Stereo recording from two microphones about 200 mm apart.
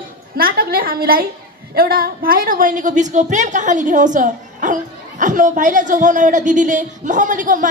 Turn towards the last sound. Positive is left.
turn(degrees=-40)  # may be behind; listen again after turning